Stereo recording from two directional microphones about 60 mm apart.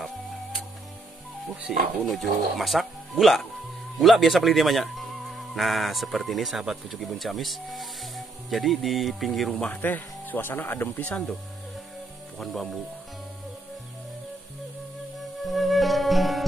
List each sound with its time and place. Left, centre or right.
0.0 s music: centre
1.7 s speech: centre
9.8 s speech: left
12.4 s speech: centre
15.4 s music: centre